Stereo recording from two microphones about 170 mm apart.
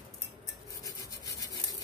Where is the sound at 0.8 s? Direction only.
20° left (ahead or behind).